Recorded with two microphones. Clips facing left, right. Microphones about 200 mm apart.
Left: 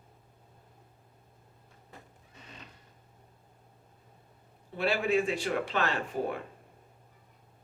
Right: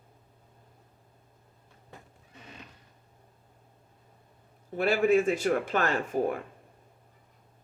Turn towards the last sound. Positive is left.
turn(degrees=-50)  # may be behind; listen again after turning